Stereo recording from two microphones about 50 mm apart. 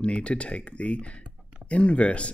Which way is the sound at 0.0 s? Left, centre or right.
Left.